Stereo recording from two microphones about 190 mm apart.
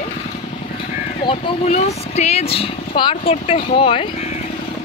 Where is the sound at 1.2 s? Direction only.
35° left (ahead or behind).